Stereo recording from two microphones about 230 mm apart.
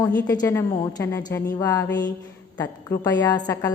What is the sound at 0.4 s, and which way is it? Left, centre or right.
A woman's voice, centre.